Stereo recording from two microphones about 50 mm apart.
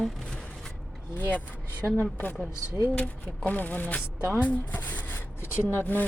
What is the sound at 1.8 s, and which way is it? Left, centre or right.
Speech, right.